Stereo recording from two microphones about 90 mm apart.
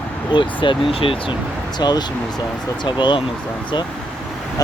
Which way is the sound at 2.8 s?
60° left (ahead or behind).